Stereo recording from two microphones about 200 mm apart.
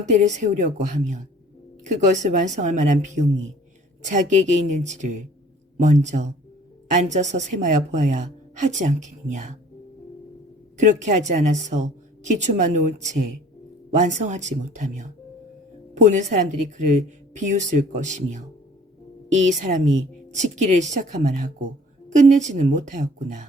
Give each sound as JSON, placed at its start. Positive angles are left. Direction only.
{"t": 0.0, "sound": "a woman's voice", "side_deg": -35}
{"t": 10.8, "sound": "a woman's voice", "side_deg": -35}
{"t": 16.0, "sound": "a woman's voice", "side_deg": -40}
{"t": 19.7, "sound": "a woman's voice", "side_deg": -45}
{"t": 20.3, "sound": "a woman's voice", "side_deg": -35}